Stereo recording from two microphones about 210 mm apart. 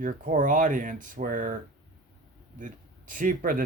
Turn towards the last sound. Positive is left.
turn(degrees=-40)  # may be behind; listen again after turning